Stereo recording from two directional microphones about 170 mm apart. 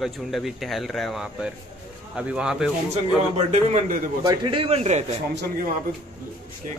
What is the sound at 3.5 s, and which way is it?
Speech, 40° right (ahead or behind).